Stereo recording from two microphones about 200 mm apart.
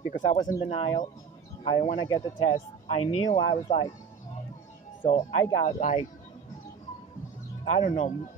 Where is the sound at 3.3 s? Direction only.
25° left (ahead or behind).